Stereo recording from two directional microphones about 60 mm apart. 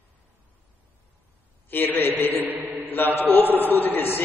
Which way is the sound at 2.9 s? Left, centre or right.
Left.